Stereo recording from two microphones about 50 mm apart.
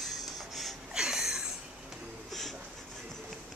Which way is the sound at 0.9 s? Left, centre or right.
Centre.